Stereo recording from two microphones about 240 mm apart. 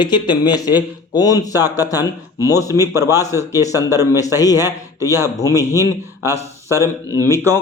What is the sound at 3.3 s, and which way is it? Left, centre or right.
A man's voice, centre.